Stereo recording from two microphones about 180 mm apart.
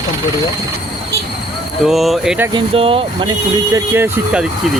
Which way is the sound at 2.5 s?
30° right (ahead or behind).